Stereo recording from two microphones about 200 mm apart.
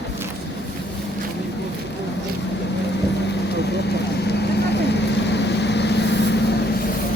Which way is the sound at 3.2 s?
60° left (ahead or behind).